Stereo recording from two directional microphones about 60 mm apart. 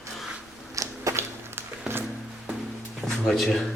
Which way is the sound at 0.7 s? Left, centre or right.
Right.